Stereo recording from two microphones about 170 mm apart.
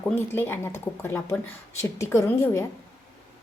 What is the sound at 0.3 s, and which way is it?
A woman's voice, 15° left (ahead or behind).